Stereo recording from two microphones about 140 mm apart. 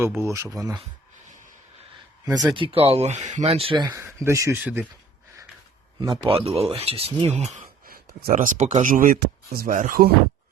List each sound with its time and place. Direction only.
0.2 s speech: 20° right (ahead or behind)
2.3 s speech: 30° right (ahead or behind)
3.9 s speech: 20° right (ahead or behind)
6.0 s speech: 40° right (ahead or behind); by 7.6 s 55° right (ahead or behind)
7.9 s speech: 90° right